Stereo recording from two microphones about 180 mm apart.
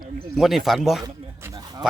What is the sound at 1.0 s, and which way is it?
Speech, 20° right (ahead or behind).